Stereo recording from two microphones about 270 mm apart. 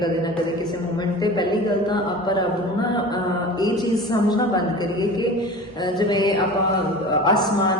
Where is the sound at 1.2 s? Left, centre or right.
Centre.